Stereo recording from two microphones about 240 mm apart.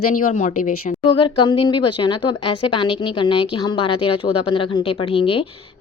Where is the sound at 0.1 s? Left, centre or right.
Left.